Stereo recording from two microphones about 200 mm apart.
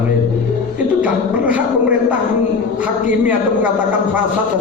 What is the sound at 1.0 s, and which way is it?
Speech, 5° right (ahead or behind).